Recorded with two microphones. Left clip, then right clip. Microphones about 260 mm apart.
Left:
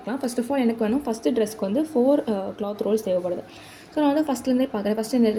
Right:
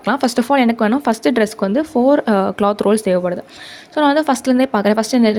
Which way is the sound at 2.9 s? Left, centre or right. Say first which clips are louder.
Right 7 dB; right.